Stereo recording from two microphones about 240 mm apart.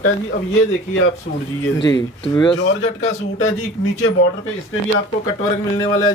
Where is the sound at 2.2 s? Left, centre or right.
Centre.